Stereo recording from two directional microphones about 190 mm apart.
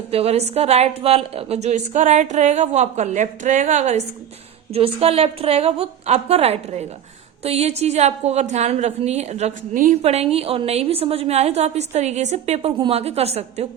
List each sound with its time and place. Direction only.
0.1 s a woman's voice: 30° right (ahead or behind)